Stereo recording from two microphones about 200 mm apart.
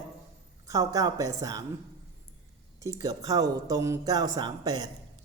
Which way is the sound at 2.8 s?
20° right (ahead or behind).